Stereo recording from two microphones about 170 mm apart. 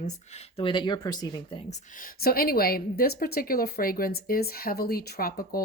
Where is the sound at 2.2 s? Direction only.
60° left (ahead or behind).